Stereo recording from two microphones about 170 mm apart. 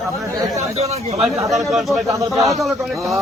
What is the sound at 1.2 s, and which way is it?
A man's voice, centre (ahead or behind).